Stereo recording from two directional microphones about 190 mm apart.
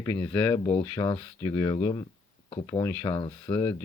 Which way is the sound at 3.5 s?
10° left (ahead or behind).